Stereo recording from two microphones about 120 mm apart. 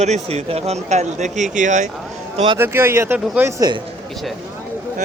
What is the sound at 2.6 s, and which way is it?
Speech, 20° right (ahead or behind).